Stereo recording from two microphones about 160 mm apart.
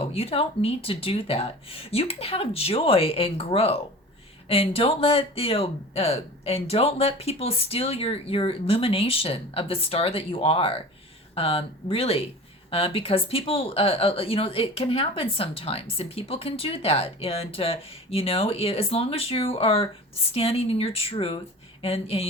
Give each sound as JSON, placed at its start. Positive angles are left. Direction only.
{"t": 0.1, "sound": "speech", "side_deg": 40}